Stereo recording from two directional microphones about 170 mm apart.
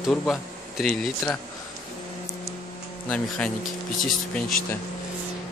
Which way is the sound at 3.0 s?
5° left (ahead or behind).